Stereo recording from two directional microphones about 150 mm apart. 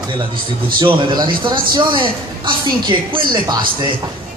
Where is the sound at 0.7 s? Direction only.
35° right (ahead or behind).